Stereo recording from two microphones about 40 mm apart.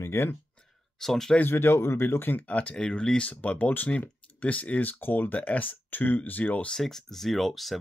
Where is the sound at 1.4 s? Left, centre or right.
Left.